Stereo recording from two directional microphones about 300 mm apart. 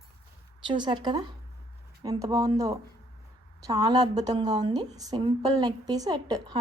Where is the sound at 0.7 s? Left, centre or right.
Centre.